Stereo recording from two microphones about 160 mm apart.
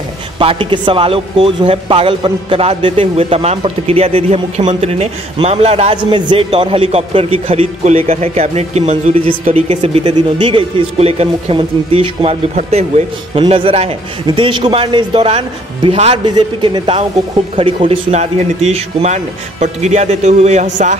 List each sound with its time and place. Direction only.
0.4 s speech: 35° right (ahead or behind)
6.1 s a man's voice: 30° right (ahead or behind); by 20.9 s 50° right (ahead or behind)